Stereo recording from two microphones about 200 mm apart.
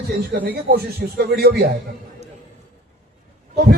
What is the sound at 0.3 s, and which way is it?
A man's voice, 50° right (ahead or behind).